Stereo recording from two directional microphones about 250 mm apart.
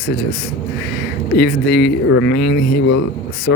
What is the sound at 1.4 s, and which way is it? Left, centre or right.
Speech, left.